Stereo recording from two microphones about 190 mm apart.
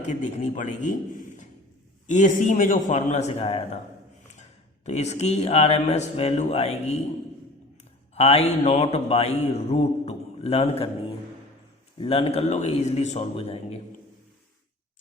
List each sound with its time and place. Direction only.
0.0 s a man's voice: 35° left (ahead or behind)
2.0 s a man's voice: 40° left (ahead or behind)
4.9 s a man's voice: 35° left (ahead or behind)
8.1 s a man's voice: 35° left (ahead or behind)
11.9 s a man's voice: 30° left (ahead or behind)